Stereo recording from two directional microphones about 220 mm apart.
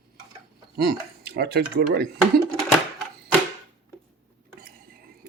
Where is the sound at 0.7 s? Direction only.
45° right (ahead or behind).